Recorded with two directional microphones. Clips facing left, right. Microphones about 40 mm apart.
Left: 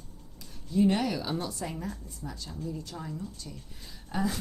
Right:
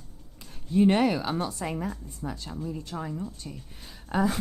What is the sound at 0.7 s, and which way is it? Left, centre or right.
Speech, right.